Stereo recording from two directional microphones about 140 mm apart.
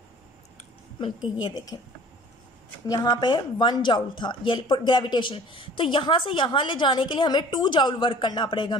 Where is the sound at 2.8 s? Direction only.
30° left (ahead or behind).